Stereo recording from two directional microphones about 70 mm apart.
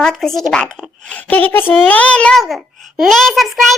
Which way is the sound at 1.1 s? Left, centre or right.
Centre.